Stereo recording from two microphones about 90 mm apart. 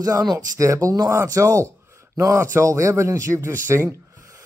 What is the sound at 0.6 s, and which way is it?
Speech, 35° right (ahead or behind).